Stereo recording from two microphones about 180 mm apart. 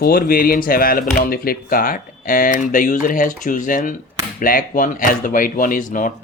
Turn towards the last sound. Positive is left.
turn(degrees=50)  # may be behind; listen again after turning